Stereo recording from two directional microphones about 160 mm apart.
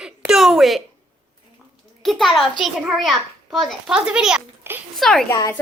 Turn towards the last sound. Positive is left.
turn(degrees=20)  # may be behind; listen again after turning